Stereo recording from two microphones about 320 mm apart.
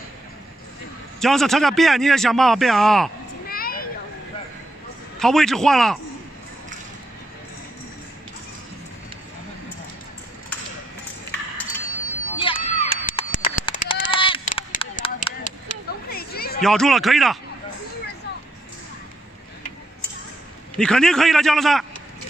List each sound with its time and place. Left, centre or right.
1.2 s a man's voice: centre
3.4 s a sound: left
5.2 s a man's voice: centre
12.4 s sheep: centre
16.6 s a man's voice: centre
20.7 s a man's voice: centre